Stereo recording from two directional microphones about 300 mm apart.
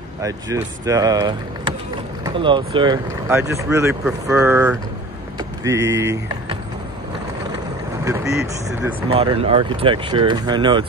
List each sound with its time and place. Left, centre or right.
0.8 s speech: centre
8.0 s speech: centre